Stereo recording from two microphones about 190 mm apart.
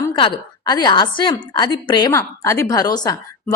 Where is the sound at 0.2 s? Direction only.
20° left (ahead or behind).